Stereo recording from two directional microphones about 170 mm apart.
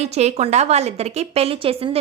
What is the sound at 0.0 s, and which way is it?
A woman's voice, 40° right (ahead or behind).